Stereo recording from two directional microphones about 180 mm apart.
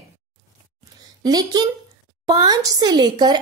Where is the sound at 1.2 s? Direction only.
20° right (ahead or behind).